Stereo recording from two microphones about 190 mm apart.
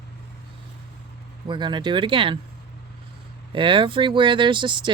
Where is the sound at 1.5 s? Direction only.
25° right (ahead or behind).